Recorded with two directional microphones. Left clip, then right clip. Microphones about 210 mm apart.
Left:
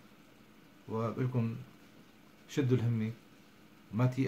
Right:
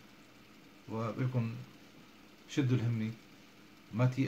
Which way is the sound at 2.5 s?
15° left (ahead or behind).